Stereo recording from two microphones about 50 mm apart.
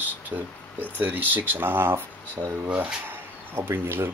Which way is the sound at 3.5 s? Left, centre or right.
Right.